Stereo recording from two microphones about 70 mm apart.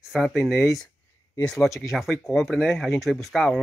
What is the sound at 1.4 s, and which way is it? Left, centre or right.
Speech, centre.